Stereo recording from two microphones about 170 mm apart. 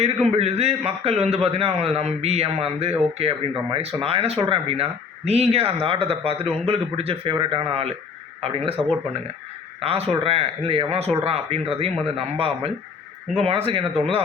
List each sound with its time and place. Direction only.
0.3 s speech: 40° right (ahead or behind)
9.8 s speech: 35° right (ahead or behind)